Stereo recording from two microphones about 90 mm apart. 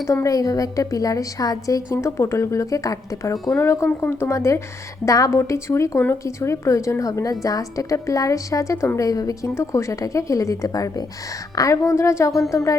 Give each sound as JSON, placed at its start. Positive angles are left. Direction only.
{"t": 0.1, "sound": "a woman's voice", "side_deg": 35}
{"t": 3.6, "sound": "a woman's voice", "side_deg": 30}